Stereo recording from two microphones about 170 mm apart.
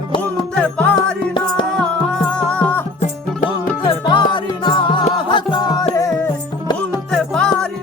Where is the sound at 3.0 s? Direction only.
50° left (ahead or behind).